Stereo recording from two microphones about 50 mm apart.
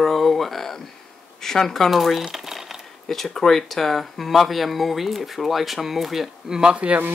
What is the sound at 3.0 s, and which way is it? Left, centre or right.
Speech, centre.